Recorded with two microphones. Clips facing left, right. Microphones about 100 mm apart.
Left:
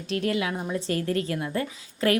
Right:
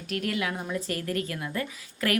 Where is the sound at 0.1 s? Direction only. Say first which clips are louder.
Left 3 dB; 25° left (ahead or behind).